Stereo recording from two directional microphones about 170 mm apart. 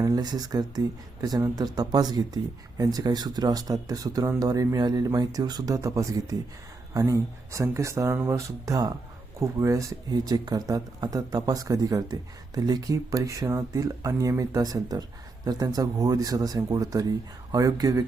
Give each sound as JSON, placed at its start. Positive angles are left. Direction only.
{"t": 0.0, "sound": "speech", "side_deg": -20}